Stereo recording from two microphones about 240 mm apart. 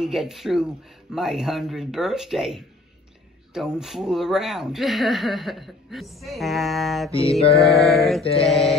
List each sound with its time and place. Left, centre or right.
0.0 s speech: centre
7.1 s music: left
7.9 s speech: centre
8.2 s music: left
8.5 s speech: centre